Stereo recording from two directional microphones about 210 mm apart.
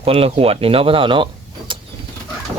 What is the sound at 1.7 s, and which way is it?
Vehicle, 25° right (ahead or behind).